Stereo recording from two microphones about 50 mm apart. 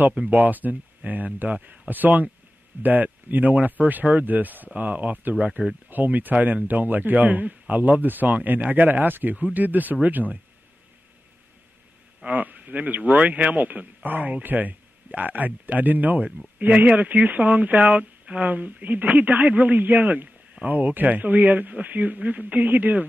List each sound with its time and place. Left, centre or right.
0.3 s a man's voice: right
12.3 s a man's voice: right